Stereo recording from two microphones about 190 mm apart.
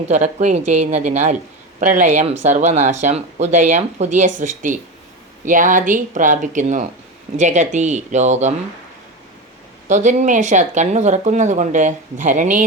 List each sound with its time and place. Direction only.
0.1 s speech: 40° right (ahead or behind)
9.9 s speech: 40° right (ahead or behind)